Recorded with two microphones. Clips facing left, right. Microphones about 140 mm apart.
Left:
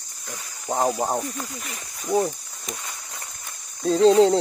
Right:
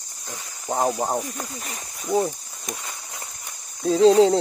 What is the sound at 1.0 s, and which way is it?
Speech, centre (ahead or behind).